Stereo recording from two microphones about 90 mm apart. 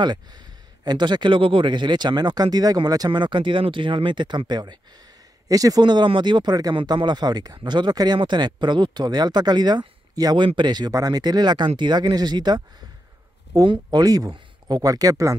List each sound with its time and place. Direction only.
0.0 s speech: 55° right (ahead or behind)
3.1 s speech: 65° right (ahead or behind)
6.8 s speech: 65° right (ahead or behind); by 10.3 s 50° right (ahead or behind)
10.3 s speech: 60° right (ahead or behind)
13.7 s speech: 55° right (ahead or behind)